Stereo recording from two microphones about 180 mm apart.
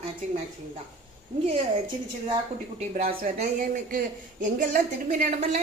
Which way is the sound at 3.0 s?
45° right (ahead or behind).